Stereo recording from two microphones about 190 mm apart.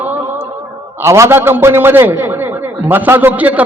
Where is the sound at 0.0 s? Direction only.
10° right (ahead or behind).